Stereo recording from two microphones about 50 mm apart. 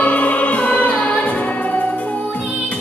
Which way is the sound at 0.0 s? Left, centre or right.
Left.